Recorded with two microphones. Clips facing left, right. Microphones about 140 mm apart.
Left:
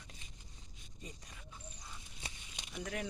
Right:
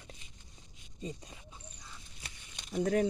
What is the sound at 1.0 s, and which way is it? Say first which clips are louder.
Speech: right 10 dB; 25° right (ahead or behind).